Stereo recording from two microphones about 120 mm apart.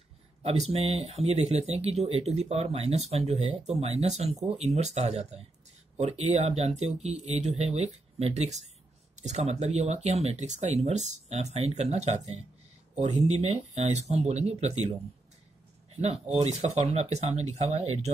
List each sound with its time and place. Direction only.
0.4 s speech: 60° right (ahead or behind)
16.0 s speech: 65° right (ahead or behind)